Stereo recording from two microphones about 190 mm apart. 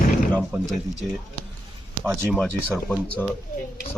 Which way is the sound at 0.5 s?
15° right (ahead or behind).